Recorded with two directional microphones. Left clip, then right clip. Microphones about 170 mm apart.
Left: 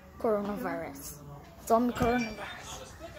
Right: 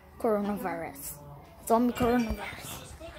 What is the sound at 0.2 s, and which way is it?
A woman's voice, 30° right (ahead or behind).